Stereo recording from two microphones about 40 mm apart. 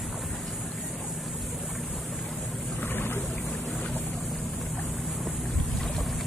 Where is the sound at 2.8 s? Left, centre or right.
Left.